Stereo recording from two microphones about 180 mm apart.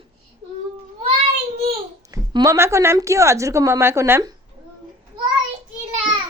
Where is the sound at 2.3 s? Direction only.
15° right (ahead or behind).